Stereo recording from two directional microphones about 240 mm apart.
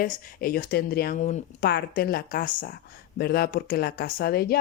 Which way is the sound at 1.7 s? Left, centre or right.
Left.